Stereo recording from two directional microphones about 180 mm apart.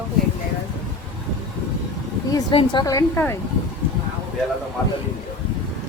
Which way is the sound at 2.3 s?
25° left (ahead or behind).